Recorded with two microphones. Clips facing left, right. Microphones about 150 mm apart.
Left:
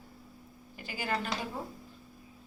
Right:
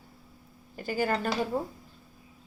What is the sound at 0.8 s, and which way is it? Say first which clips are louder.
Speech: right 6 dB; 45° right (ahead or behind).